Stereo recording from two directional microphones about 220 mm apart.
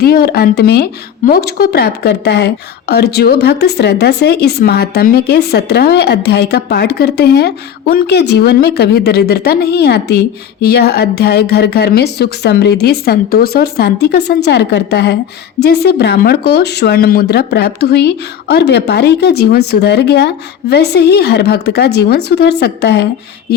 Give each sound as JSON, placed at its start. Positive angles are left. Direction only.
{"t": 0.0, "sound": "speech", "side_deg": 45}